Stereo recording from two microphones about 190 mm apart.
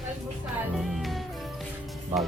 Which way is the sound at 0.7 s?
Centre (ahead or behind).